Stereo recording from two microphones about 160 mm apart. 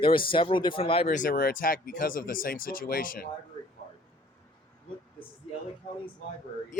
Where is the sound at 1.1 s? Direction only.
60° left (ahead or behind).